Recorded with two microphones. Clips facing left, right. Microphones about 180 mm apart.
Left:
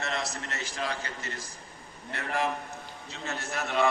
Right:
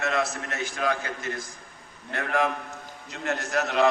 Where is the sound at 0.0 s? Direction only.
55° right (ahead or behind).